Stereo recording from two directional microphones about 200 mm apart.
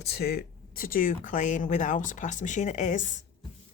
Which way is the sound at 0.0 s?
55° left (ahead or behind).